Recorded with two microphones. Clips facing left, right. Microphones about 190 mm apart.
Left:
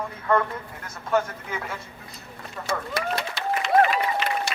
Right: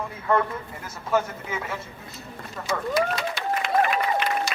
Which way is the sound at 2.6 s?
60° left (ahead or behind).